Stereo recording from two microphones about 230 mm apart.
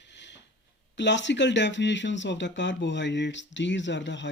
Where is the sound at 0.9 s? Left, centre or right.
Left.